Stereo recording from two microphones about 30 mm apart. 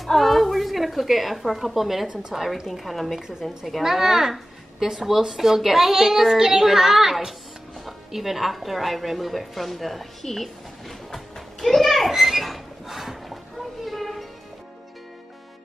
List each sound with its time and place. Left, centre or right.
0.0 s a woman's voice: centre
2.7 s a woman's voice: centre
3.2 s a child's voice: centre
3.4 s a woman's voice: centre
3.8 s a woman's voice: centre
11.6 s children playing: centre
12.1 s a sound: centre
13.8 s music: centre